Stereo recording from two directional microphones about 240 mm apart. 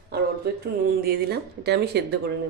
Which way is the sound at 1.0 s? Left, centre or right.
Right.